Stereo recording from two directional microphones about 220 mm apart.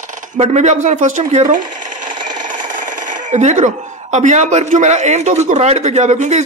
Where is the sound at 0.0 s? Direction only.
35° right (ahead or behind).